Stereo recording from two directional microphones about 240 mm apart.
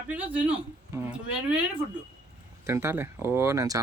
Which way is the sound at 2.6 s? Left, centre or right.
Centre.